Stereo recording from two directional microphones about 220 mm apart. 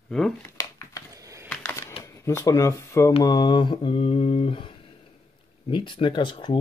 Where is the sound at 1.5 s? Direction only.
10° left (ahead or behind).